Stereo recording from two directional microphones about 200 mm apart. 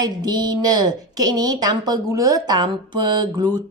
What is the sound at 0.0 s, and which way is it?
A woman's voice, 20° right (ahead or behind).